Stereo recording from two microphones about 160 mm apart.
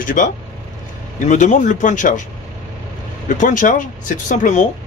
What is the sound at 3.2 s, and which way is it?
Speech, 50° left (ahead or behind).